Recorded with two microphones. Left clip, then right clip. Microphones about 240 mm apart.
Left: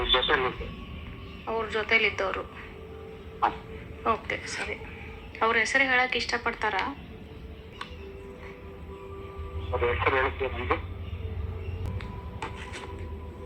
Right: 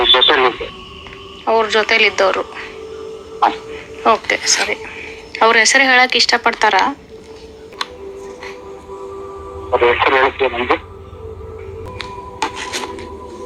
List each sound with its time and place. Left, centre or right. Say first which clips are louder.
0.0 s radio: right 14 dB; right
1.5 s a woman's voice: right 14 dB; right
9.7 s a woman's voice: right 13 dB; right
11.9 s music: right 18 dB; right